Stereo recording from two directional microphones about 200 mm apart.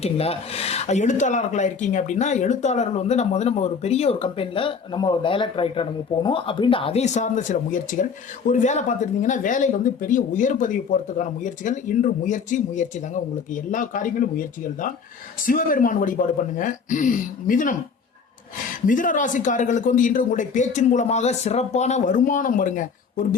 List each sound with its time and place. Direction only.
0.0 s speech: 30° left (ahead or behind)
18.9 s speech: 40° left (ahead or behind)